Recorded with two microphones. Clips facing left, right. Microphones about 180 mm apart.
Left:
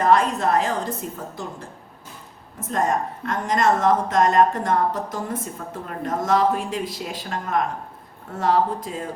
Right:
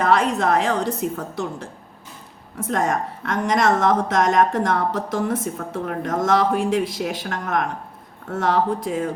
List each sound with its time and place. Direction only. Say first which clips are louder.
0.0 s a woman's voice: even; 75° right (ahead or behind)
2.6 s a woman's voice: right 1 dB; 75° right (ahead or behind)